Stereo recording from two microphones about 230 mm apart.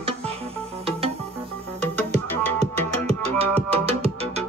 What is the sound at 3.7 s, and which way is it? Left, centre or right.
Music, right.